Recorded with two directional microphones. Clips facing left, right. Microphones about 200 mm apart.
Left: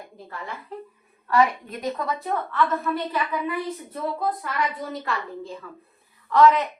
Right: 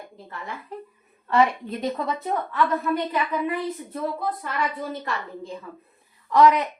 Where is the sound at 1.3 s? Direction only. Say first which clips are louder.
Right 1 dB; 25° right (ahead or behind).